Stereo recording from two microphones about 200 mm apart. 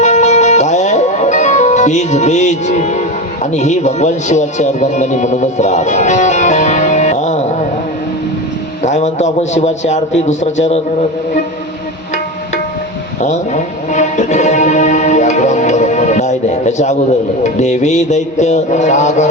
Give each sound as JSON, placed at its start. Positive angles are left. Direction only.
{"t": 0.0, "sound": "music", "side_deg": 35}
{"t": 3.5, "sound": "speech", "side_deg": 35}
{"t": 8.8, "sound": "a man's voice", "side_deg": 35}
{"t": 13.9, "sound": "music", "side_deg": 35}
{"t": 17.4, "sound": "a man's voice", "side_deg": 35}